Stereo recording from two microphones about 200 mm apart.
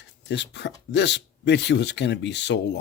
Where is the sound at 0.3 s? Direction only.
60° left (ahead or behind).